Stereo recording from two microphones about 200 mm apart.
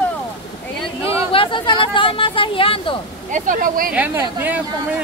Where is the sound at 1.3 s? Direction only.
25° left (ahead or behind).